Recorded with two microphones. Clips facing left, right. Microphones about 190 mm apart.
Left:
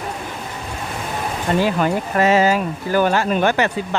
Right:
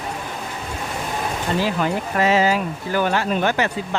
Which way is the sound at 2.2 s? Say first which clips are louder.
Left 2 dB; 45° left (ahead or behind).